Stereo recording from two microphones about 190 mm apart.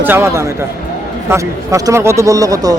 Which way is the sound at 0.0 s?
10° right (ahead or behind).